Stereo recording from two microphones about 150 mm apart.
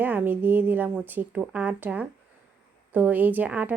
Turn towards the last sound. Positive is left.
turn(degrees=-10)  # may be behind; listen again after turning